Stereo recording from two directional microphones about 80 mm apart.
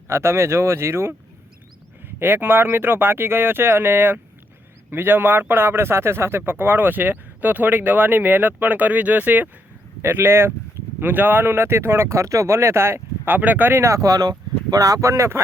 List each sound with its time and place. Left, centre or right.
0.1 s speech: right
13.8 s speech: right